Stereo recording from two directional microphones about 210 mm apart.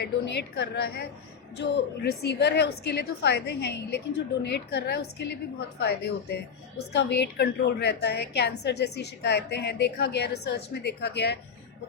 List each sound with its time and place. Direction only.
0.0 s a woman's voice: 55° left (ahead or behind)